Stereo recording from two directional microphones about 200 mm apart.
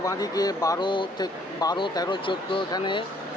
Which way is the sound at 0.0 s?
20° left (ahead or behind).